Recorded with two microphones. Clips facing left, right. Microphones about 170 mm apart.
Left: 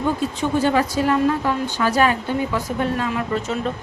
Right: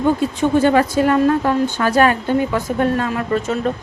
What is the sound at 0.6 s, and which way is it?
A woman's voice, 55° right (ahead or behind).